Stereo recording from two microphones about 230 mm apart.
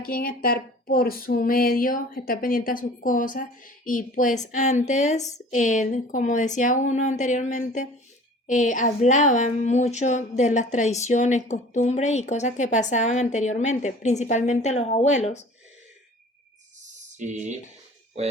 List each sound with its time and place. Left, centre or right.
0.0 s speech: left
16.8 s a sound: right
18.2 s speech: right